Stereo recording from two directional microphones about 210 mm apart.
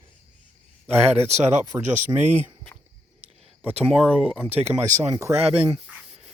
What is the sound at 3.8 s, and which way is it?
Speech, 5° right (ahead or behind).